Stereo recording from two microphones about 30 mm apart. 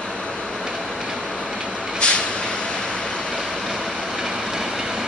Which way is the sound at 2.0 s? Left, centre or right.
Left.